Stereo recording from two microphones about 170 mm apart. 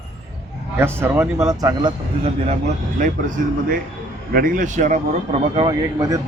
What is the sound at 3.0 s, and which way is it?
A man's voice, 50° right (ahead or behind).